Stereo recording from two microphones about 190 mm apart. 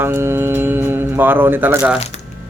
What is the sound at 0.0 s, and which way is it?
Music, 10° right (ahead or behind).